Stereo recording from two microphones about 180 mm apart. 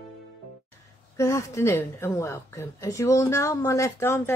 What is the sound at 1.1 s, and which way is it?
A woman's voice, 15° left (ahead or behind).